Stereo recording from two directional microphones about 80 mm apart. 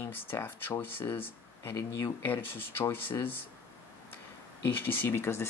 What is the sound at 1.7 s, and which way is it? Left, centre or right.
Speech, left.